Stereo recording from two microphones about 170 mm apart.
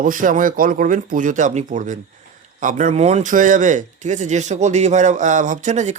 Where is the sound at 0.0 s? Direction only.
50° right (ahead or behind).